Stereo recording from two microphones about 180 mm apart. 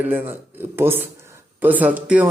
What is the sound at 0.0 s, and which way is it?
Speech, 10° right (ahead or behind).